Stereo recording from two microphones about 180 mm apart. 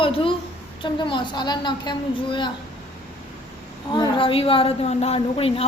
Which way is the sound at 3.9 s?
25° left (ahead or behind).